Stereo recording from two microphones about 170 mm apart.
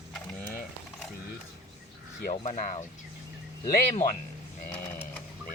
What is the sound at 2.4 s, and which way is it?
Speech, 45° left (ahead or behind).